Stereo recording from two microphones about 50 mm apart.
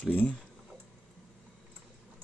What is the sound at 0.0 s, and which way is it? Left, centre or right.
Speech, left.